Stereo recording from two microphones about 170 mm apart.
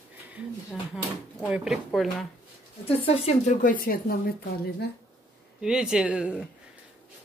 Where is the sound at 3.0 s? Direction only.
40° left (ahead or behind); by 4.7 s 65° left (ahead or behind).